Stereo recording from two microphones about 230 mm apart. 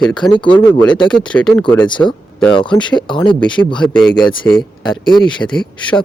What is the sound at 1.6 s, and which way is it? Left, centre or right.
Speech, centre.